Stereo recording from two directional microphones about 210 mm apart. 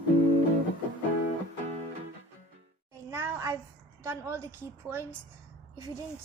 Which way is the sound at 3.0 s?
10° right (ahead or behind).